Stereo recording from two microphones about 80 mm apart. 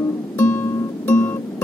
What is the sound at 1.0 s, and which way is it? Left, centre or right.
Music, left.